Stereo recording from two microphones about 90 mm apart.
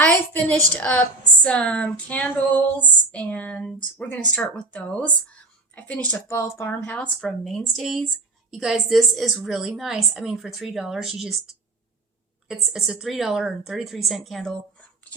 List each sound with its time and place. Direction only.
0.0 s a sound: 15° left (ahead or behind)
6.2 s speech: 30° left (ahead or behind)
6.7 s speech: 15° left (ahead or behind)